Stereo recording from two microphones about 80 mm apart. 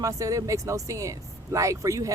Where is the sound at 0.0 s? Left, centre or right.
Right.